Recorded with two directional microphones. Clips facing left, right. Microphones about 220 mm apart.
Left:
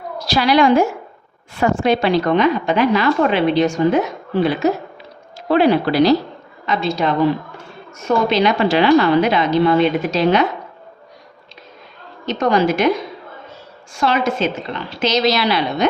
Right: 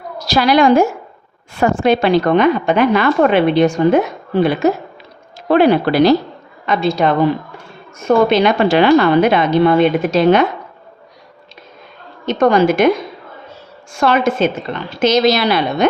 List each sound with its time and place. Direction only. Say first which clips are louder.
0.3 s a woman's voice: right 2 dB; 45° right (ahead or behind)
5.5 s a woman's voice: right 3 dB; 55° right (ahead or behind)
12.2 s a woman's voice: right 4 dB; 50° right (ahead or behind)
13.9 s a woman's voice: right 4 dB; 55° right (ahead or behind)